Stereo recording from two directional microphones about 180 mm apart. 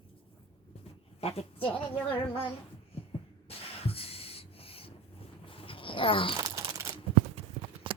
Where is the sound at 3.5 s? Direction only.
30° left (ahead or behind).